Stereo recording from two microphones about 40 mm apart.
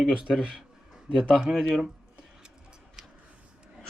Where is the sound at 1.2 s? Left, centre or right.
Centre.